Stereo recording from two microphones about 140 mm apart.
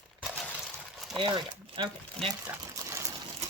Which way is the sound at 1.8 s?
35° right (ahead or behind).